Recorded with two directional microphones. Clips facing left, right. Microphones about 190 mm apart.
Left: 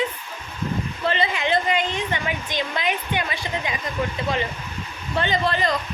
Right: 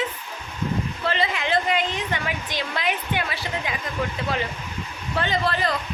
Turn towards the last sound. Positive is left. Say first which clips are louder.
# left 1 dB
turn(degrees=0)  # may be behind; listen again after turning